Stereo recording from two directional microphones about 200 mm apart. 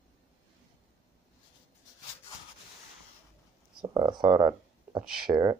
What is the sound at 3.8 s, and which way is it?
Speech, 20° right (ahead or behind).